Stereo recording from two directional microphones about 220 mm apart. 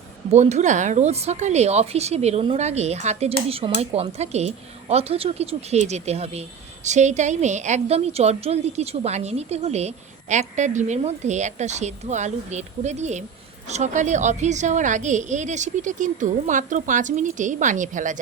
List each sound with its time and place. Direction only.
0.3 s a woman's voice: 30° right (ahead or behind)